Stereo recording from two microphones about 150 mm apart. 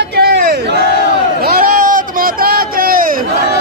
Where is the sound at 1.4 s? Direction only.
75° right (ahead or behind).